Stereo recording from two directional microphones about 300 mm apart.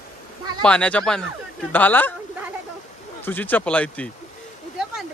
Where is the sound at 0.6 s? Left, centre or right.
Centre.